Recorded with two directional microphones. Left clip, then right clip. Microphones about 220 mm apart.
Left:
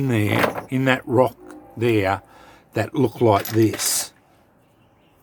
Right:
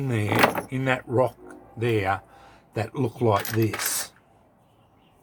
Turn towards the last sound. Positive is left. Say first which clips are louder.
# left 6 dB
turn(degrees=45)  # may be behind; listen again after turning